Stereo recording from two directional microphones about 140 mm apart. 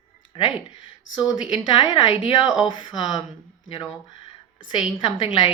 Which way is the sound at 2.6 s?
35° left (ahead or behind).